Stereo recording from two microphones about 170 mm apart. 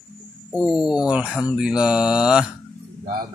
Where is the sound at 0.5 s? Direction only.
Centre (ahead or behind).